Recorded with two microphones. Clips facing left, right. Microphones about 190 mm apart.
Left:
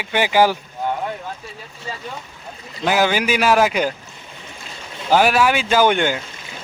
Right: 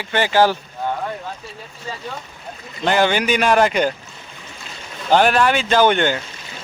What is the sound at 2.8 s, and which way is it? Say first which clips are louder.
A man's voice: right 1 dB; 5° left (ahead or behind).